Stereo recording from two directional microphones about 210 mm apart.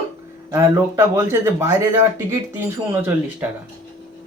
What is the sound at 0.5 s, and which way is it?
Speech, 15° right (ahead or behind).